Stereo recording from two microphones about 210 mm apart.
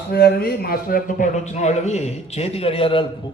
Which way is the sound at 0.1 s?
50° left (ahead or behind).